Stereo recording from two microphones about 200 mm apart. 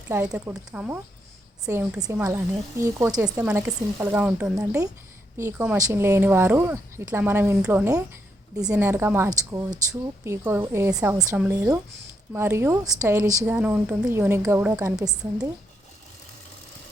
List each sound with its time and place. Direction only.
0.1 s speech: 10° right (ahead or behind)
15.0 s a woman's voice: 5° right (ahead or behind)